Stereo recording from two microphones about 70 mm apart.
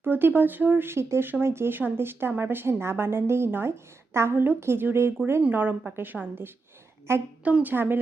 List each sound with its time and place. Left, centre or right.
0.0 s speech: right
5.4 s a woman's voice: right
7.4 s a woman's voice: right